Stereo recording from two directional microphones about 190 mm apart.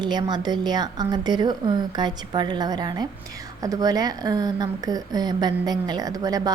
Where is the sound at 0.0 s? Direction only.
20° right (ahead or behind).